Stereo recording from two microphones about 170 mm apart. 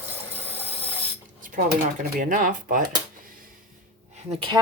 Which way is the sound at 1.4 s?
50° right (ahead or behind).